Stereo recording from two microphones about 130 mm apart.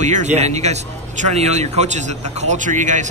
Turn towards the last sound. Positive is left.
turn(degrees=-70)  # may be behind; listen again after turning